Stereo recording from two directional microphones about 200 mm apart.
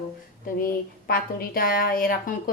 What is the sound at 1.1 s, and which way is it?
A woman's voice, 45° left (ahead or behind).